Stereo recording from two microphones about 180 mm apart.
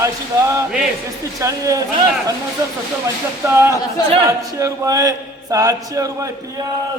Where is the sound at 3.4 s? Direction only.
15° right (ahead or behind).